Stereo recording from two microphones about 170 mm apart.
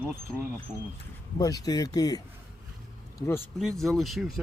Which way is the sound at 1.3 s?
20° left (ahead or behind).